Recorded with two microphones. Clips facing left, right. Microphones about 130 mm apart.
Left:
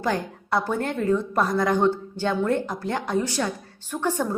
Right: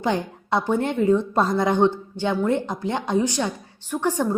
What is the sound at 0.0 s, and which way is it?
A woman's voice, 20° right (ahead or behind).